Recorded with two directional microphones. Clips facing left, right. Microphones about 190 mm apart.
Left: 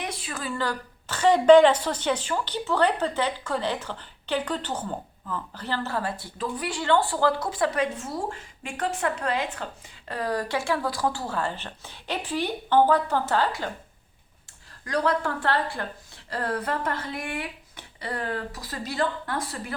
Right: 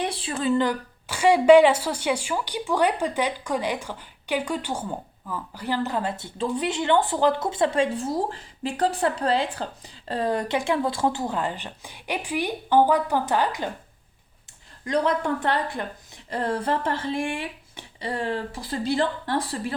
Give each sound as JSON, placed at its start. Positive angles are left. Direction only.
{"t": 0.0, "sound": "a woman's voice", "side_deg": -30}
{"t": 14.8, "sound": "a woman's voice", "side_deg": -20}